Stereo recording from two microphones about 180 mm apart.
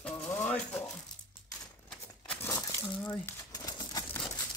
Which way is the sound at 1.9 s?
10° left (ahead or behind).